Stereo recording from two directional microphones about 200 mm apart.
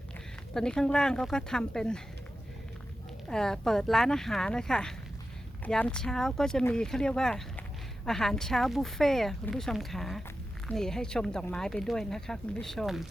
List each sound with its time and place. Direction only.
0.5 s speech: 5° left (ahead or behind)
3.2 s speech: 5° left (ahead or behind)